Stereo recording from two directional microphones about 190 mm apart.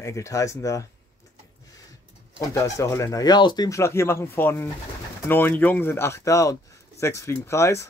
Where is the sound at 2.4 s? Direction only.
15° left (ahead or behind).